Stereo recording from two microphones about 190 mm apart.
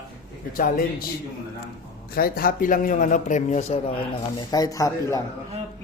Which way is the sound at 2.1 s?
50° left (ahead or behind).